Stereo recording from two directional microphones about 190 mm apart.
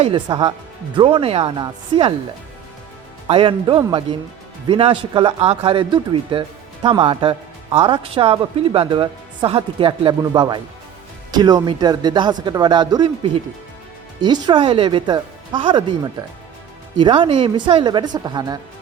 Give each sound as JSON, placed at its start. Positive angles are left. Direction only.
{"t": 0.0, "sound": "speech", "side_deg": -25}
{"t": 3.2, "sound": "speech", "side_deg": -25}
{"t": 14.2, "sound": "speech", "side_deg": -25}
{"t": 17.0, "sound": "speech", "side_deg": -25}